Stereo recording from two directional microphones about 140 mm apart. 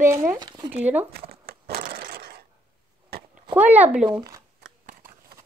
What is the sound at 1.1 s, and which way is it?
Crushing, 90° right.